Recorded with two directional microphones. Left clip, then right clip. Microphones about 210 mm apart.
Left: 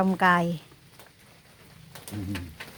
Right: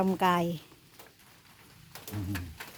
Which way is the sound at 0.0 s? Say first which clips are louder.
Left 5 dB; 10° right (ahead or behind).